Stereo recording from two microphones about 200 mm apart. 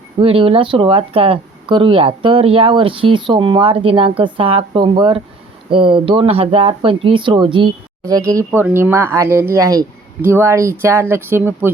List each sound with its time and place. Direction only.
0.2 s speech: 25° right (ahead or behind)
8.4 s speech: 5° right (ahead or behind)